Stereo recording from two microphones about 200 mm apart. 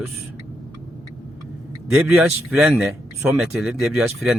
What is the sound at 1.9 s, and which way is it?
Speech, 10° right (ahead or behind).